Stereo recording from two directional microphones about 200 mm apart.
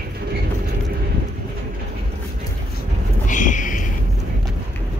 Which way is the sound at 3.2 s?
40° left (ahead or behind).